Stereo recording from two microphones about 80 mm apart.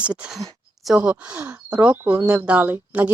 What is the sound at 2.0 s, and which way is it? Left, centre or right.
Speech, right.